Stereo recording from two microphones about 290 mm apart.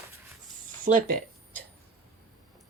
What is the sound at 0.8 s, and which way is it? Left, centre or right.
Speech, right.